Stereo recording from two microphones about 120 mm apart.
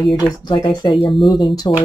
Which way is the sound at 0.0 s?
Centre (ahead or behind).